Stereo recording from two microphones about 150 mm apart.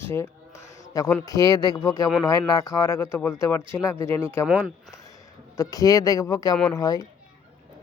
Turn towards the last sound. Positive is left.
turn(degrees=25)  # may be behind; listen again after turning